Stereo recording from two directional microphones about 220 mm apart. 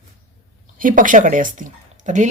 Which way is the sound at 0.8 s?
40° right (ahead or behind).